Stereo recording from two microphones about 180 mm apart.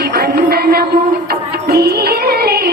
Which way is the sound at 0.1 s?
60° right (ahead or behind).